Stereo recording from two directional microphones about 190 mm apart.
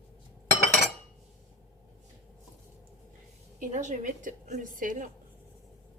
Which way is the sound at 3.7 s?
40° right (ahead or behind).